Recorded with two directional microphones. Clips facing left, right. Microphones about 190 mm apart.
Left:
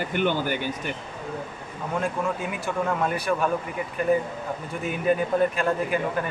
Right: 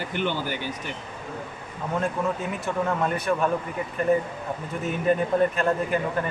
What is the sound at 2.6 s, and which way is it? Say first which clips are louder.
Speech: even; centre (ahead or behind).